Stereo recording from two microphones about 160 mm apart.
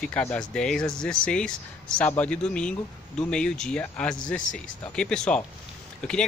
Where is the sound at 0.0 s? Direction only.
10° left (ahead or behind).